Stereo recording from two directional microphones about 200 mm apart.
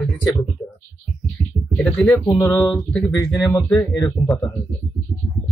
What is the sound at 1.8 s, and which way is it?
Speech, 5° left (ahead or behind).